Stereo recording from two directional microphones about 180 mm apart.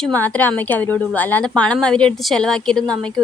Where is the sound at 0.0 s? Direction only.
10° left (ahead or behind).